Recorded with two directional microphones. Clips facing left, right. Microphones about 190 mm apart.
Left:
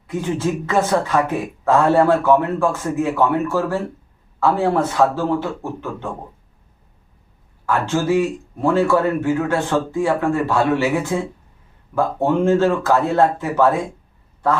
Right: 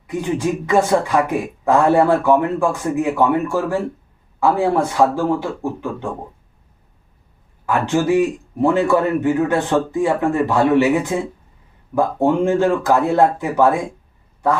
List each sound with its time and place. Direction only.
0.1 s speech: 15° right (ahead or behind)
7.7 s speech: 15° right (ahead or behind)